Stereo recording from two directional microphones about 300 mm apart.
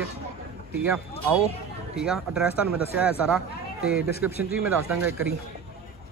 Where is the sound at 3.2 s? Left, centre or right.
Centre.